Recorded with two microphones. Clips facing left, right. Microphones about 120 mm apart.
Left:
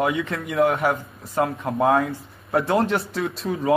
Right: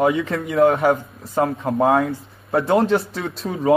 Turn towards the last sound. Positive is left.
turn(degrees=0)  # may be behind; listen again after turning